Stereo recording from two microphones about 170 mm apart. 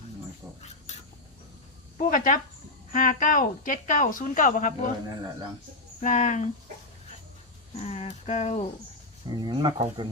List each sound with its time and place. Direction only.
2.0 s a woman's voice: 55° left (ahead or behind)
6.0 s a woman's voice: 45° left (ahead or behind)
7.9 s a woman's voice: 40° left (ahead or behind)
9.3 s speech: 25° right (ahead or behind)